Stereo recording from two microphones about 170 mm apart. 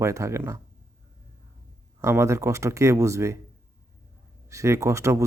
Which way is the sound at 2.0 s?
15° right (ahead or behind).